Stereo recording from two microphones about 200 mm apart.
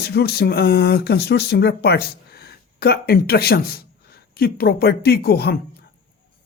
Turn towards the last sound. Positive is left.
turn(degrees=50)  # may be behind; listen again after turning